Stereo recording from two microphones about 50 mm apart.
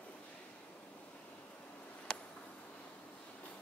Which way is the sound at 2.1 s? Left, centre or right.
Centre.